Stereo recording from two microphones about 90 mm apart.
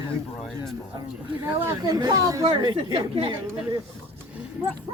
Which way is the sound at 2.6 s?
55° right (ahead or behind).